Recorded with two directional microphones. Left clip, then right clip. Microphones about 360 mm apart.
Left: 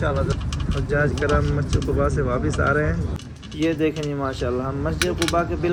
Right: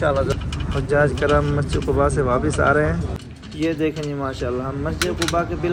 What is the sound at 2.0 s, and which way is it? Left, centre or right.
Speech, right.